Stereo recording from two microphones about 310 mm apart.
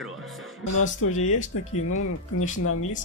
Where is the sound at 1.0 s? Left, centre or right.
Left.